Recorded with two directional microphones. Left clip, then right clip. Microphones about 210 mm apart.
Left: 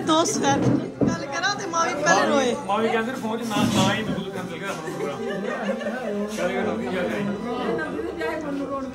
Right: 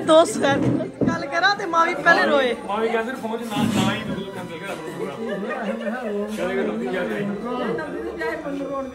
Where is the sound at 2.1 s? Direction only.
15° left (ahead or behind).